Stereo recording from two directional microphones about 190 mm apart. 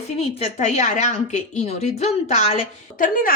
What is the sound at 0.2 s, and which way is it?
A woman's voice, 35° left (ahead or behind).